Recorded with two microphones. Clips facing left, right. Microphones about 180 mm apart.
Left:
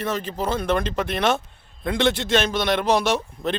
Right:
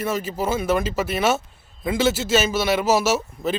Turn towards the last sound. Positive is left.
turn(degrees=-5)  # may be behind; listen again after turning